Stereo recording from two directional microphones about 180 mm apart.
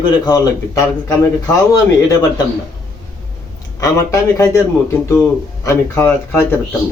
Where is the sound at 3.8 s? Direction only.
15° left (ahead or behind).